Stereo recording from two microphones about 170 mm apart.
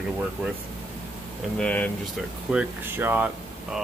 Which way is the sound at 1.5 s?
10° left (ahead or behind).